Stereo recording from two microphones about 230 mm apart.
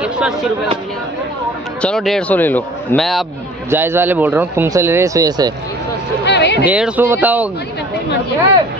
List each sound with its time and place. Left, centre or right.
0.0 s chatter: centre
1.8 s a man's voice: centre
3.7 s speech: centre
6.2 s speech: left
6.6 s speech: centre